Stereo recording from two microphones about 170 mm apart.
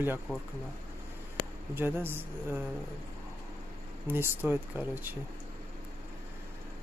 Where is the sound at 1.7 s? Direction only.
15° right (ahead or behind).